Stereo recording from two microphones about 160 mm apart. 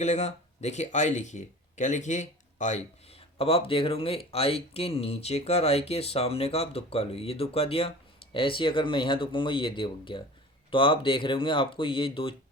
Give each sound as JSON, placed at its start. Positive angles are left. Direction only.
{"t": 0.0, "sound": "speech", "side_deg": 45}